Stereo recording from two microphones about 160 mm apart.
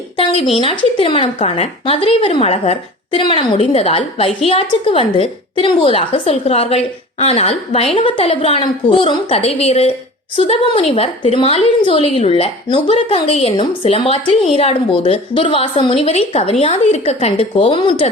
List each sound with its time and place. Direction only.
0.6 s a woman's voice: 35° left (ahead or behind)